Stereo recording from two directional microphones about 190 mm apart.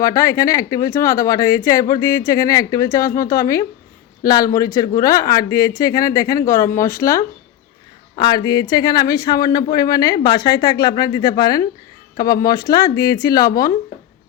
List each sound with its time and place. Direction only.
0.0 s speech: 20° left (ahead or behind)
8.1 s speech: 25° left (ahead or behind)